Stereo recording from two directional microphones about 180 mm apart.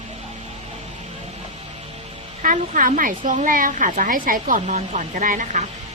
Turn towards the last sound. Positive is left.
turn(degrees=-40)  # may be behind; listen again after turning